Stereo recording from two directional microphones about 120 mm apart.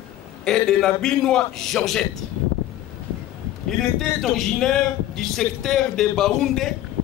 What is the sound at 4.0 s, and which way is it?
A man's voice, centre (ahead or behind).